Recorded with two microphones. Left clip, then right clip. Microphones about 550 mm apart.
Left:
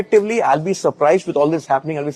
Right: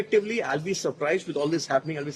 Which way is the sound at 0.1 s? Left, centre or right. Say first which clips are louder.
Left 11 dB; left.